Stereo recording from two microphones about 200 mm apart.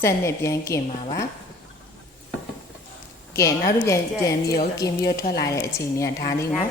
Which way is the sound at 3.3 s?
15° left (ahead or behind).